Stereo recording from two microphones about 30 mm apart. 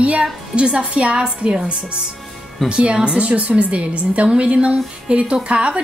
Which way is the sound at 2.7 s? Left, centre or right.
Right.